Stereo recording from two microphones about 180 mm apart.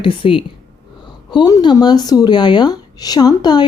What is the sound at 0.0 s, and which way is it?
Speech, 30° left (ahead or behind).